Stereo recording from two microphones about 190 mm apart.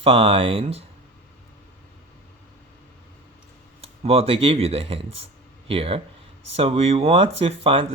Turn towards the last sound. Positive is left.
turn(degrees=-30)  # may be behind; listen again after turning